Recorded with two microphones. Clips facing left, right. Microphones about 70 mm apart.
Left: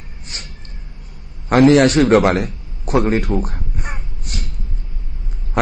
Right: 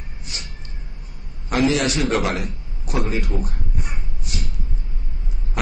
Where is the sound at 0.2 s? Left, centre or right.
Left.